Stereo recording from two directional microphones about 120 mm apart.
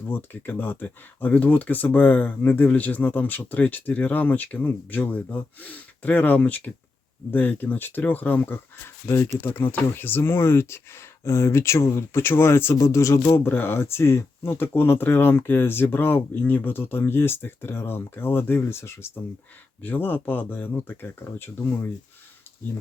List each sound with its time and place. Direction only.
0.0 s speech: 15° left (ahead or behind)